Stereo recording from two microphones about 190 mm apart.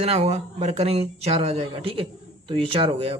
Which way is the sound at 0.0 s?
30° right (ahead or behind).